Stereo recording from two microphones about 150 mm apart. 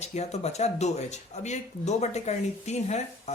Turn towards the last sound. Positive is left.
turn(degrees=50)  # may be behind; listen again after turning